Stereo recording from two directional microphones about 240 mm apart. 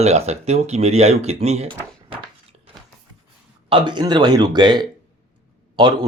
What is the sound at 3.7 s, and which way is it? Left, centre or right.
Speech, centre.